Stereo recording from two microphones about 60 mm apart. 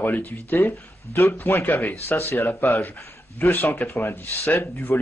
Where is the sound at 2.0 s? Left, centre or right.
Left.